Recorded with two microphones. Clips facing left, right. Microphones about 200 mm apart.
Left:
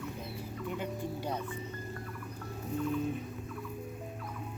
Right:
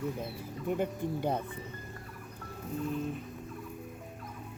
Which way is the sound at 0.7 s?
55° right (ahead or behind).